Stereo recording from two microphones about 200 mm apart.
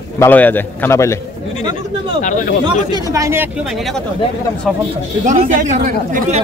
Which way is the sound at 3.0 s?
15° right (ahead or behind).